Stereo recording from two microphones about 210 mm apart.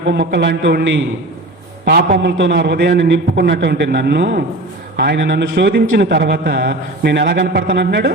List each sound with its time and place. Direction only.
0.1 s a man's voice: 55° right (ahead or behind)